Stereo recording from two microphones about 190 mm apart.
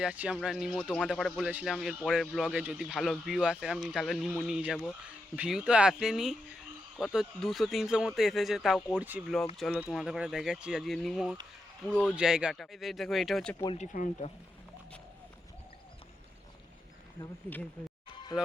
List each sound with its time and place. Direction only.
0.0 s speech: 5° right (ahead or behind)
13.7 s speech: 45° left (ahead or behind)
17.2 s speech: 10° left (ahead or behind)